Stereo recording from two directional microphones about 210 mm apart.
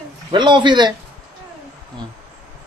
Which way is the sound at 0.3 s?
20° right (ahead or behind).